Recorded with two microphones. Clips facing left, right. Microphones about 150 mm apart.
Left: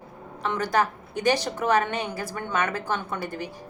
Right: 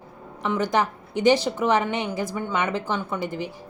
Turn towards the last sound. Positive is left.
turn(degrees=-15)  # may be behind; listen again after turning